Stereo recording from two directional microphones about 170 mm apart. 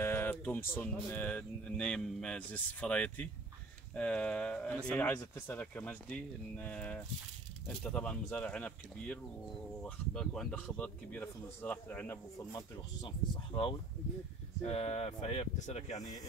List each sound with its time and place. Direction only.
0.0 s speech: 15° left (ahead or behind)
3.9 s a sound: 5° left (ahead or behind)
4.8 s speech: 10° left (ahead or behind); by 16.0 s 40° left (ahead or behind)